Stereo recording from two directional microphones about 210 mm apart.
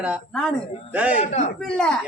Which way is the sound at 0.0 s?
Centre (ahead or behind).